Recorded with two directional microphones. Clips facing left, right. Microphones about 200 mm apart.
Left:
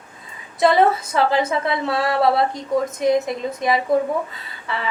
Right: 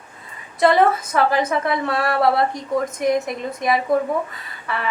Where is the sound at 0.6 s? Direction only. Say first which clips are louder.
Even; 25° left (ahead or behind).